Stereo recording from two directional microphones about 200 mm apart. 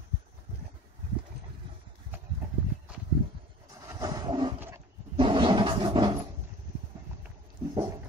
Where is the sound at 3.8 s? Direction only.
20° right (ahead or behind).